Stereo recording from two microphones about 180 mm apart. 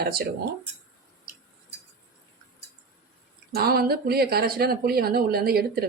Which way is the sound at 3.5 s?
60° right (ahead or behind).